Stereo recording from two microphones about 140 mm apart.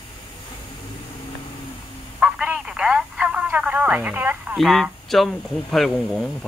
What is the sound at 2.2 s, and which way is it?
Telephone, 5° right (ahead or behind).